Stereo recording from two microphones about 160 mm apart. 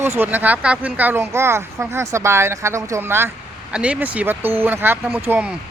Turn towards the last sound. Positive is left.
turn(degrees=-5)  # may be behind; listen again after turning